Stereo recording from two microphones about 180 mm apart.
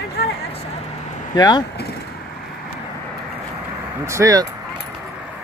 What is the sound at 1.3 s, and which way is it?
Speech, 20° left (ahead or behind).